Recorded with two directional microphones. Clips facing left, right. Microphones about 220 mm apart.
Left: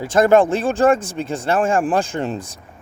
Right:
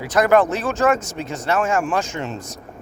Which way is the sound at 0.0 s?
25° left (ahead or behind).